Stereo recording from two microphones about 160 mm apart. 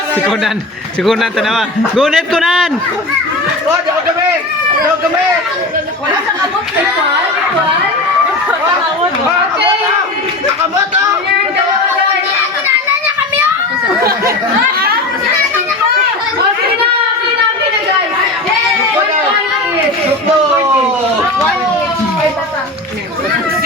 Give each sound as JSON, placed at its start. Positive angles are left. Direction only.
{"t": 1.0, "sound": "a man's voice", "side_deg": 0}
{"t": 14.0, "sound": "speech", "side_deg": -70}